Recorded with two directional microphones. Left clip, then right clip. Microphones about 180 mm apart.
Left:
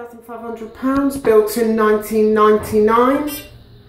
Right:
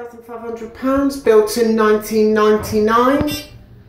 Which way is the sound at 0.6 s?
Centre (ahead or behind).